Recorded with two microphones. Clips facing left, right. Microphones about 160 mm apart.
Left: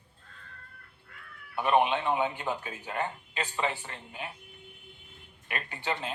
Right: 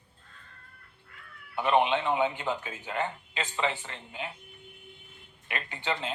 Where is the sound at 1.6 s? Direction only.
20° right (ahead or behind).